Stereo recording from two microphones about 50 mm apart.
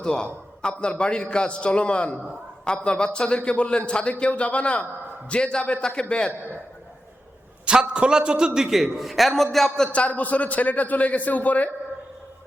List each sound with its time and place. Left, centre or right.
0.0 s a man's voice: centre
7.6 s a man's voice: centre
9.9 s a man's voice: left